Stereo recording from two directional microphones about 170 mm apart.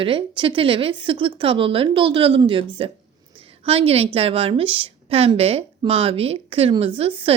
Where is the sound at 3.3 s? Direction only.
30° right (ahead or behind).